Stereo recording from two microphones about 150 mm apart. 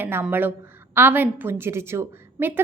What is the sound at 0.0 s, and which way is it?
A woman's voice, 15° right (ahead or behind).